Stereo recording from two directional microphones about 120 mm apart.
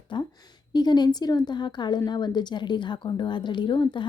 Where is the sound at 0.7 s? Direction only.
35° left (ahead or behind).